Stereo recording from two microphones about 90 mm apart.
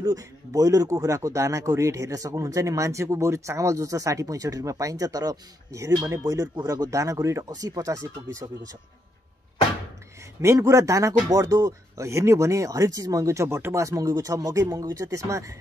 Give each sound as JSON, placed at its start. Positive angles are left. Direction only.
{"t": 0.0, "sound": "speech", "side_deg": -40}
{"t": 10.4, "sound": "speech", "side_deg": -35}